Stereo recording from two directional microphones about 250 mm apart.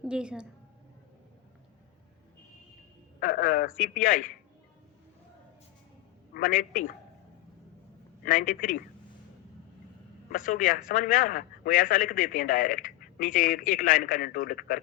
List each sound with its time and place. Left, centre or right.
0.0 s a woman's voice: centre
3.2 s a man's voice: left
6.3 s a man's voice: left
8.2 s a man's voice: left
10.3 s a man's voice: left